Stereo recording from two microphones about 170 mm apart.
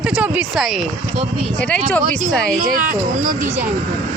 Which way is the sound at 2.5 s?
55° right (ahead or behind).